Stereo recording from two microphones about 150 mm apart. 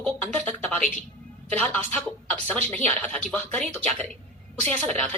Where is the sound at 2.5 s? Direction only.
45° right (ahead or behind).